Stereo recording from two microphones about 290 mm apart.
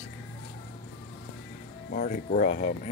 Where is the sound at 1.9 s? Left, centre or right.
Left.